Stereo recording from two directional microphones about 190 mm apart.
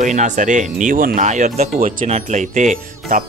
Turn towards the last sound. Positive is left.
turn(degrees=-40)  # may be behind; listen again after turning